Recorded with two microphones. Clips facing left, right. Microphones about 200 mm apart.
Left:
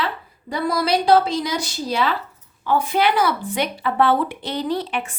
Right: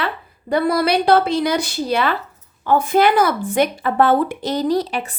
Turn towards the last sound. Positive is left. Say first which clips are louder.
# right 5 dB
turn(degrees=-35)  # may be behind; listen again after turning